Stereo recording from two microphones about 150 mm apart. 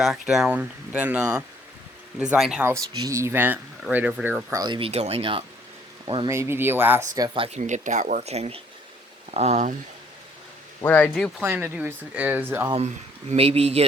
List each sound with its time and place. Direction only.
0.0 s speech: centre (ahead or behind)
2.6 s speech: 20° right (ahead or behind)
4.5 s speech: 30° right (ahead or behind)
4.9 s speech: 45° right (ahead or behind)
6.2 s speech: 20° right (ahead or behind)
7.2 s speech: 40° right (ahead or behind)
7.6 s speech: 55° right (ahead or behind)
10.8 s speech: 10° left (ahead or behind)
11.3 s speech: 15° right (ahead or behind)
13.3 s speech: 40° right (ahead or behind)